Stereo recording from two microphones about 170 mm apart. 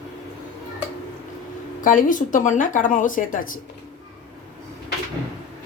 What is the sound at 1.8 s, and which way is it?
Speech, 50° left (ahead or behind).